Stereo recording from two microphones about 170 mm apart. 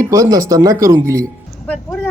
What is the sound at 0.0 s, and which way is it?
Speech, 20° right (ahead or behind).